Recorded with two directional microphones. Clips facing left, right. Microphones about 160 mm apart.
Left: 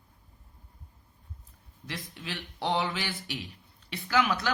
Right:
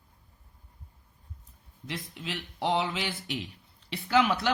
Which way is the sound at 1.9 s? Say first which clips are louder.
Right 2 dB; 15° right (ahead or behind).